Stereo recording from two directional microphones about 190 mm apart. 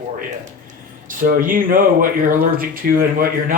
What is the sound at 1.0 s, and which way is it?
Speech, 45° right (ahead or behind).